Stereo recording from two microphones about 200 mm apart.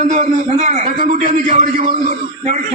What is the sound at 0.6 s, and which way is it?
A man's voice, 40° right (ahead or behind).